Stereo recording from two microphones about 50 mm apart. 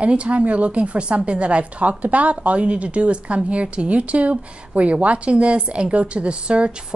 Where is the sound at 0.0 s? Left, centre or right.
Right.